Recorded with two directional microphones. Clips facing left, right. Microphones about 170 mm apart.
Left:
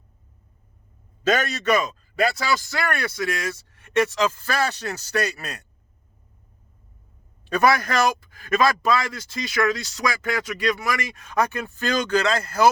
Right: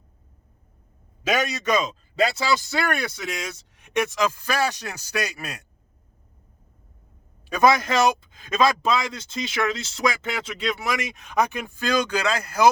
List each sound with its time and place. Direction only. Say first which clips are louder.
1.2 s a man's voice: left 2 dB; 10° right (ahead or behind)
7.4 s a man's voice: right 1 dB; 15° right (ahead or behind)